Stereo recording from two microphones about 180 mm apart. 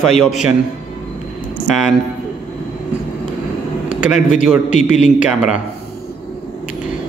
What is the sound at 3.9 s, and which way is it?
A man's voice, 5° right (ahead or behind).